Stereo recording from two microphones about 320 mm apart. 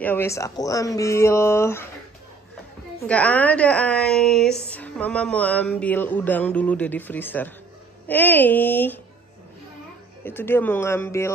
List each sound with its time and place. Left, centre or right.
0.0 s speech: centre
3.1 s a woman's voice: centre
10.2 s speech: centre